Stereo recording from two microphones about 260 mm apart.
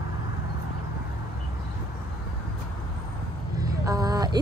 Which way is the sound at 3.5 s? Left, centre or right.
Centre.